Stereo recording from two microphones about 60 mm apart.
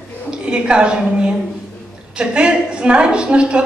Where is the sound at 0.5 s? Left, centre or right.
Centre.